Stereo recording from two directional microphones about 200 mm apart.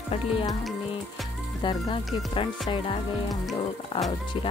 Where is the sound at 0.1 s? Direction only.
25° left (ahead or behind).